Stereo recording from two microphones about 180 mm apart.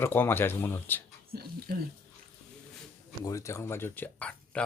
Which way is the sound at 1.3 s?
60° right (ahead or behind).